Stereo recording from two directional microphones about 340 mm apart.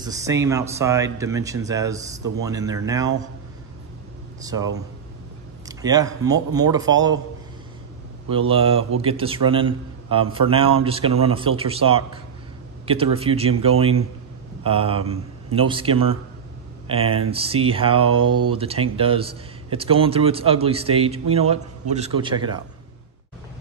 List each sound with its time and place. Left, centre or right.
0.0 s a man's voice: centre
4.4 s a man's voice: centre
8.3 s a man's voice: centre